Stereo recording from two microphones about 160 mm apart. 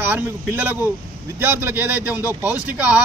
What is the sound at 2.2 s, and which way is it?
Speech, 20° left (ahead or behind).